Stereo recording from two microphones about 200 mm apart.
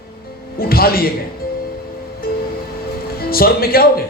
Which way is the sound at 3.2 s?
50° left (ahead or behind).